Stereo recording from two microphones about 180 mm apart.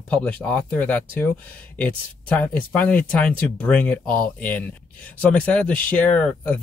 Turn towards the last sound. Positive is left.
turn(degrees=10)  # may be behind; listen again after turning